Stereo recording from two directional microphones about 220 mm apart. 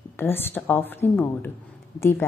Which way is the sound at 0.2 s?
10° left (ahead or behind).